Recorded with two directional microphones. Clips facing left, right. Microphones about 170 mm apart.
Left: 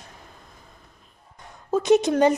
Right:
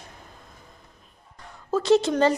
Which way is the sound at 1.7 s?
20° left (ahead or behind).